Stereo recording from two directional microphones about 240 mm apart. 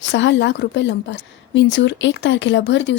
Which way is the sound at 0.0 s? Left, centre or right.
Left.